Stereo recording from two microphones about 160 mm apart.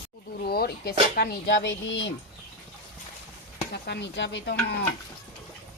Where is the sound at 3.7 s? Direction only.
90° left.